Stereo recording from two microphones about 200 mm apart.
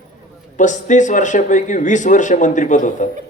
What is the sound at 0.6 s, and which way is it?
Speech, 40° left (ahead or behind).